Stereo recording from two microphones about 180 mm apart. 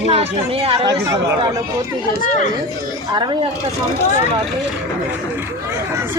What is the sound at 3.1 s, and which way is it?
Speech, 25° right (ahead or behind).